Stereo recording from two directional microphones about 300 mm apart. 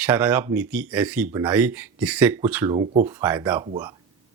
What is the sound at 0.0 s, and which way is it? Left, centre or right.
Speech, centre.